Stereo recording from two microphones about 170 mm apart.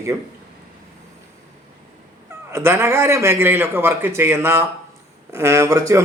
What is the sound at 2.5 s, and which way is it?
A man's voice, 15° right (ahead or behind).